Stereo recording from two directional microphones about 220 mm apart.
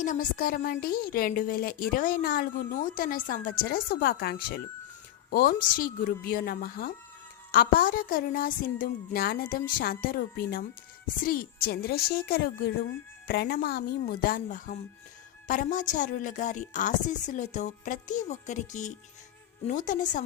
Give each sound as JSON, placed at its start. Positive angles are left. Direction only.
{"t": 0.0, "sound": "a woman's voice", "side_deg": 35}